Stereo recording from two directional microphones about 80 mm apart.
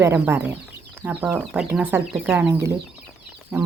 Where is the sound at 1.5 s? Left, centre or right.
Centre.